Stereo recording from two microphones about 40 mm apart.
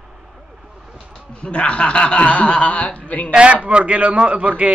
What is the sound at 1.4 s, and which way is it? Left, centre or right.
Speech, left.